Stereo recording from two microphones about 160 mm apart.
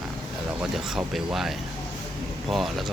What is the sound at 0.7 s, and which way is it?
Speech, centre (ahead or behind).